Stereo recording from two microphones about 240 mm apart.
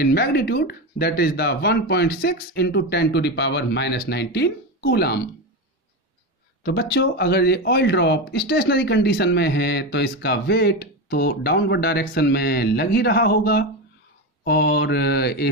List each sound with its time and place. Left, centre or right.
0.0 s speech: left
6.6 s speech: left
14.4 s mantra: left